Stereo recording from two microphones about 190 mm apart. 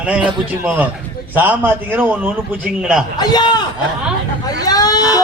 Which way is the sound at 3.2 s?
20° left (ahead or behind).